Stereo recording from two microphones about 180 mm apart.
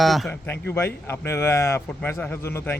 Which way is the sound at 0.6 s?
15° left (ahead or behind).